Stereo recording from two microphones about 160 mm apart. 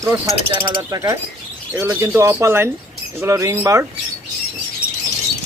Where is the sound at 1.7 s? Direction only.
15° right (ahead or behind).